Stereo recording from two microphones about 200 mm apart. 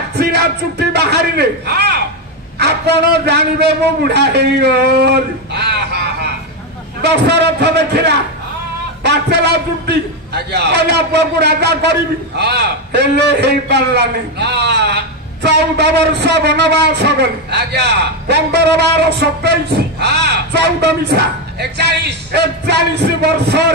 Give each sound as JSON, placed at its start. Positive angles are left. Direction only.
{"t": 0.2, "sound": "a man's voice", "side_deg": -55}